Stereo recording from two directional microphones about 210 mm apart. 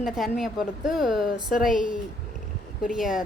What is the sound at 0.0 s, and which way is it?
A woman's voice, centre (ahead or behind).